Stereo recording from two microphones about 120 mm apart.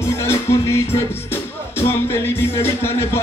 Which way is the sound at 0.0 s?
20° left (ahead or behind).